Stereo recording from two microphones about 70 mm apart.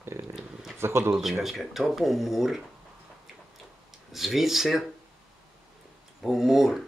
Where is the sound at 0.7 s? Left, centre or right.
Right.